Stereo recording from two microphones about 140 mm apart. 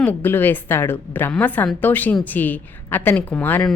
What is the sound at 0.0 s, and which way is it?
A woman's voice, 10° left (ahead or behind).